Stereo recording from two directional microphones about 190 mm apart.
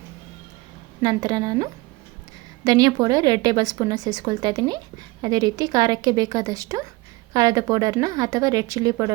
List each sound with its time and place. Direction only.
1.0 s speech: 20° right (ahead or behind)